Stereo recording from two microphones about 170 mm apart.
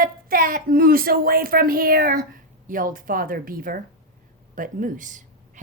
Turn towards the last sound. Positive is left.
turn(degrees=-50)  # may be behind; listen again after turning